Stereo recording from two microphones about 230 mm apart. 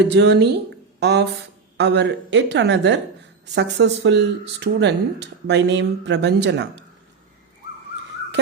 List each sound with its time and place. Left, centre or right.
0.1 s speech: right